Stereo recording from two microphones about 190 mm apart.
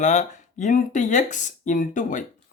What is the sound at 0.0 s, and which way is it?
Speech, 40° left (ahead or behind).